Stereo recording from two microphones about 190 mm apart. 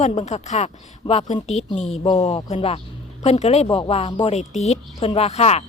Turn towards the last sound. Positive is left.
turn(degrees=35)  # may be behind; listen again after turning